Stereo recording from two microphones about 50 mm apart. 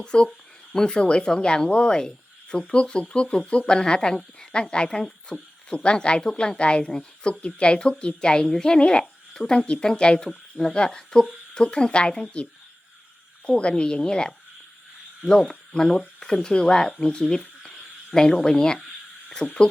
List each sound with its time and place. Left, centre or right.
0.0 s a woman's voice: centre
9.6 s a woman's voice: left
15.7 s speech: centre
17.6 s a sound: centre
19.4 s a woman's voice: left